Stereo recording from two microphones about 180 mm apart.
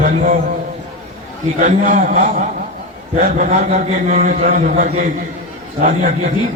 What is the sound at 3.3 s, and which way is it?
A man's voice, 45° right (ahead or behind).